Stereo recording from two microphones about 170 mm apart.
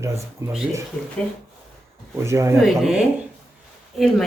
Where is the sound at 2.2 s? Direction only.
15° right (ahead or behind).